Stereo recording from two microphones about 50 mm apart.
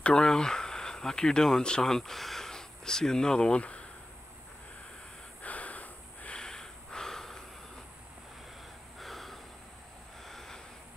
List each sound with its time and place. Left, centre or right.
0.1 s speech: centre
5.4 s snort: left
6.4 s snort: centre
9.0 s snort: centre